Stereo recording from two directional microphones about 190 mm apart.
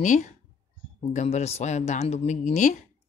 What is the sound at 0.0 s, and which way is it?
Speech, 40° left (ahead or behind).